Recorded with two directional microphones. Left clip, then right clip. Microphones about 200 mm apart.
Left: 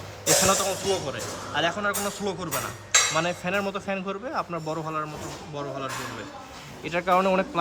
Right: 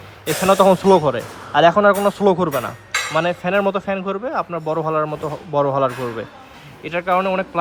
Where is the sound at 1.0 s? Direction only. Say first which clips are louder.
Right 11 dB; 15° right (ahead or behind).